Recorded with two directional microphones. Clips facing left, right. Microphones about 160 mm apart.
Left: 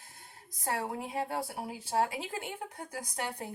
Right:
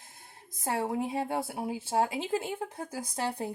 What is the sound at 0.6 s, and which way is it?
Speech, 25° right (ahead or behind).